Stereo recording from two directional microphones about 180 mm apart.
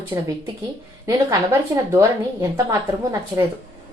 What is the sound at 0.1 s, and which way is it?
A woman's voice, 25° right (ahead or behind).